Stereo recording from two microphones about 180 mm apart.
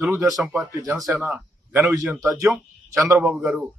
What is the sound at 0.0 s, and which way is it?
Speech, 15° right (ahead or behind).